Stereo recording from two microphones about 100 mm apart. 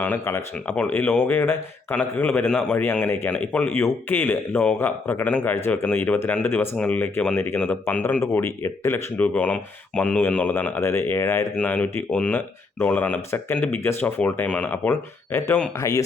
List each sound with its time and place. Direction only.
0.0 s speech: 20° left (ahead or behind)
2.5 s speech: 10° left (ahead or behind)
2.7 s speech: 20° left (ahead or behind)
10.8 s speech: 25° left (ahead or behind)
11.5 s speech: 10° left (ahead or behind)
15.8 s speech: 30° left (ahead or behind)